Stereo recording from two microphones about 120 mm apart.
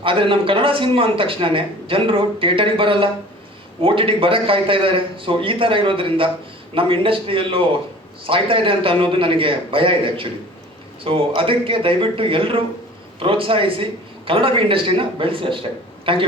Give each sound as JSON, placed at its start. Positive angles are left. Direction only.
{"t": 0.0, "sound": "a man's voice", "side_deg": -45}